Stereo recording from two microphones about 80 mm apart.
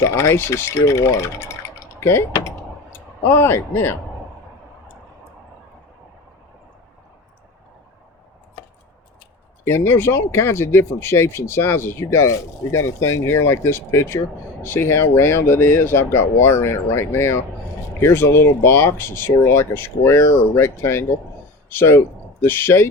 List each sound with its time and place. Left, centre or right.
0.0 s speech: left
3.2 s speech: left
9.6 s speech: left